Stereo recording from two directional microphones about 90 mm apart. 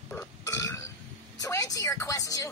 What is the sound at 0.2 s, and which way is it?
Burping, 35° left (ahead or behind).